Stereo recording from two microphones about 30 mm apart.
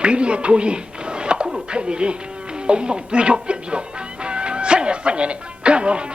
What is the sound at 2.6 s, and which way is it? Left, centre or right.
Speech, right.